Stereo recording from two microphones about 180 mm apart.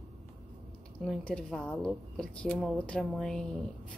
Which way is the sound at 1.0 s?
5° left (ahead or behind).